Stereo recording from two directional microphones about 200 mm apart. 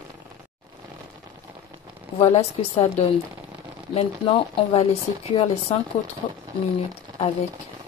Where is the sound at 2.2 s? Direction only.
30° left (ahead or behind).